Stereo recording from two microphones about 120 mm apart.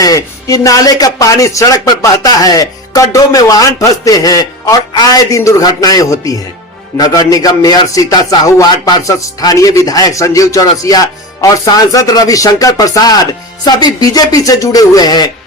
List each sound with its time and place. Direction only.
0.0 s a man's voice: 30° left (ahead or behind)